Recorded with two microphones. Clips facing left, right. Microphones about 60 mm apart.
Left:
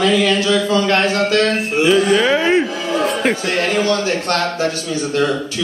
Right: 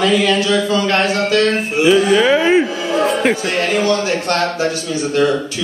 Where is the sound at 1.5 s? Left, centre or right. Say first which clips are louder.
Right 1 dB; centre.